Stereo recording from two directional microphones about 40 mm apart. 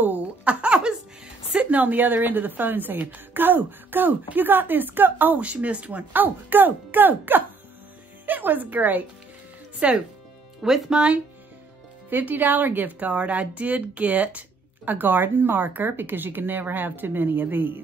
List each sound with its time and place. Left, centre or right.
0.5 s laughter: right
1.5 s a woman's voice: right
5.4 s speech: right
6.1 s a woman's voice: right
9.8 s speech: right
10.6 s speech: centre
12.1 s a woman's voice: right
13.1 s speech: right
14.9 s speech: right